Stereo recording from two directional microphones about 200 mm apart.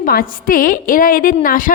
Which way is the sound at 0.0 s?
45° left (ahead or behind).